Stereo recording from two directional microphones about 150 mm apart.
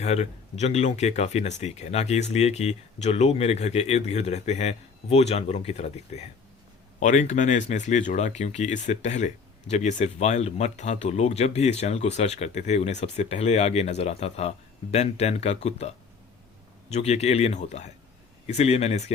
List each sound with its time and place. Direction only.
0.0 s speech: 50° left (ahead or behind)
7.0 s speech: 55° left (ahead or behind)
16.9 s speech: 45° left (ahead or behind)